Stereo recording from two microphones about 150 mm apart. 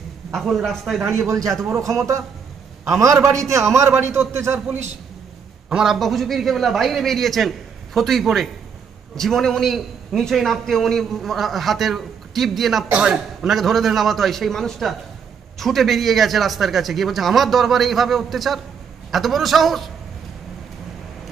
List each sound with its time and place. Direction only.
0.3 s a man's voice: centre (ahead or behind)
1.1 s a man's voice: 20° right (ahead or behind)
5.7 s a man's voice: 5° right (ahead or behind)